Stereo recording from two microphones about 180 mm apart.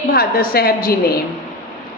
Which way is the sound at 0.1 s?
60° left (ahead or behind).